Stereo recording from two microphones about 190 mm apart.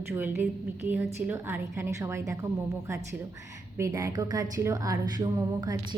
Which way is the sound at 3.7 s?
15° right (ahead or behind).